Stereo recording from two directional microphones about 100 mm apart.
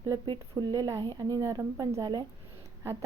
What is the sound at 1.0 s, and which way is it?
Speech, 45° right (ahead or behind).